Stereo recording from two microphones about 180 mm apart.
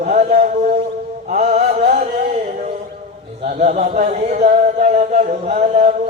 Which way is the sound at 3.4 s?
40° right (ahead or behind).